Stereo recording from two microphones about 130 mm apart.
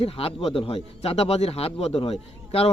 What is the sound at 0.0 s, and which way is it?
Speech, 45° left (ahead or behind).